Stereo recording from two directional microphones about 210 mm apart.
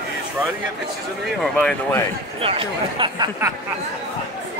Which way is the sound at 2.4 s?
25° right (ahead or behind).